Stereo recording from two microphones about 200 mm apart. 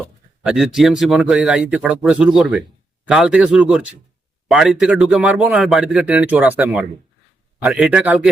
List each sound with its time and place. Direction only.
0.4 s a man's voice: centre (ahead or behind)